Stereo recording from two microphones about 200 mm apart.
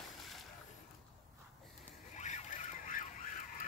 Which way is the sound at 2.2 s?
35° left (ahead or behind).